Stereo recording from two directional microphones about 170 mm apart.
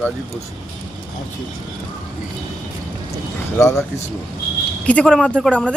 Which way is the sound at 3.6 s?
15° left (ahead or behind).